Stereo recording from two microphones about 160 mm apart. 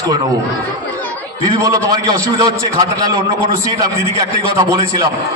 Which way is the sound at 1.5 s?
20° right (ahead or behind).